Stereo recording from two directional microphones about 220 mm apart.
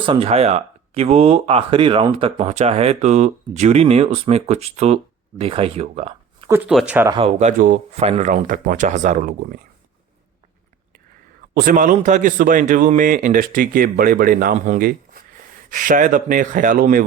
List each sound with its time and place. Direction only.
0.0 s speech: 25° right (ahead or behind)
6.5 s speech: 5° right (ahead or behind)
7.1 s a man's voice: 25° right (ahead or behind)
11.5 s a man's voice: 40° right (ahead or behind)